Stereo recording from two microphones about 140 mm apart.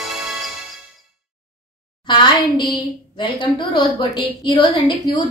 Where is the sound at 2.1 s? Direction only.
35° left (ahead or behind).